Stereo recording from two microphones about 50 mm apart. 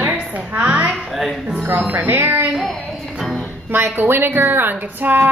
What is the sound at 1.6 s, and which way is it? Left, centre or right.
Speech, right.